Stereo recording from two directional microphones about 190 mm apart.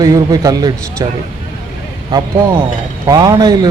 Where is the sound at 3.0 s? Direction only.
20° right (ahead or behind).